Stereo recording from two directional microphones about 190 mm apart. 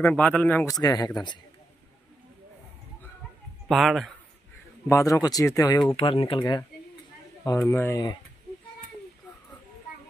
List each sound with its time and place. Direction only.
0.0 s speech: 5° left (ahead or behind); by 1.4 s 20° left (ahead or behind)
3.6 s a man's voice: centre (ahead or behind)
4.8 s speech: 15° left (ahead or behind)
5.9 s speech: 30° left (ahead or behind)
7.6 s speech: 10° left (ahead or behind)